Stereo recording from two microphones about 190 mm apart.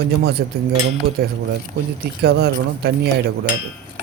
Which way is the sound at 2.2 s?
60° right (ahead or behind).